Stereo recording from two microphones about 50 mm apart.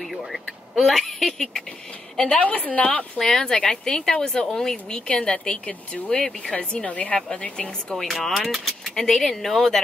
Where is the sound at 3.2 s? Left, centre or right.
Centre.